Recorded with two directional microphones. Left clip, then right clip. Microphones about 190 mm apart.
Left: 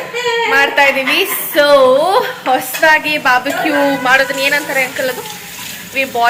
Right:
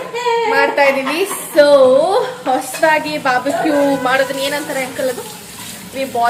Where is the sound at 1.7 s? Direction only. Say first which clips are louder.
Left 2 dB; 15° left (ahead or behind).